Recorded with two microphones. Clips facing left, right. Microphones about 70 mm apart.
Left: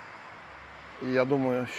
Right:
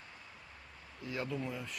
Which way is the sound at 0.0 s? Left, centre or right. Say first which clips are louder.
Left 9 dB; left.